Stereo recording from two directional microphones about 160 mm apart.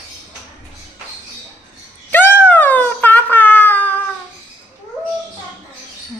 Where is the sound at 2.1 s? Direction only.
10° left (ahead or behind).